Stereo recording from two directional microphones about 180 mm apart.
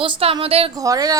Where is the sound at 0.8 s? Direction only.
20° right (ahead or behind).